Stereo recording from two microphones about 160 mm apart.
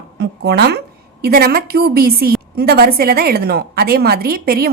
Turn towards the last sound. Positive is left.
turn(degrees=-70)  # may be behind; listen again after turning